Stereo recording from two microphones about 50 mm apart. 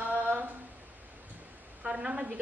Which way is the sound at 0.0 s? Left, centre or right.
Right.